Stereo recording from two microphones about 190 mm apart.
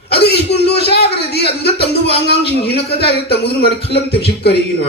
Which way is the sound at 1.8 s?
30° left (ahead or behind).